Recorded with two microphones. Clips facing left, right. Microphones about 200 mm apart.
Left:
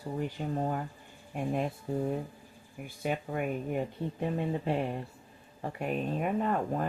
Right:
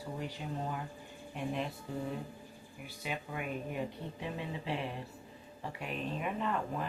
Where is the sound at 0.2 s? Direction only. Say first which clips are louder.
Left 9 dB; 50° left (ahead or behind).